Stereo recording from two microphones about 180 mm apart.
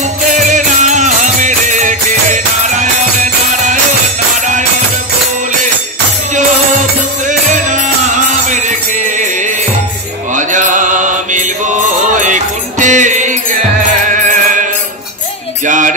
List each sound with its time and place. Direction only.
0.2 s music: 45° right (ahead or behind)
7.2 s music: 45° right (ahead or behind)
10.3 s music: 45° right (ahead or behind)